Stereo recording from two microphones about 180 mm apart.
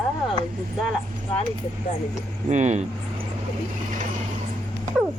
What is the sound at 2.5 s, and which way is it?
Speech, 40° right (ahead or behind).